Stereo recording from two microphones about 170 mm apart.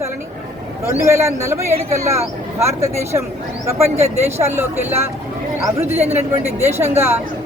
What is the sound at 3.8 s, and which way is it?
Speech, 40° right (ahead or behind).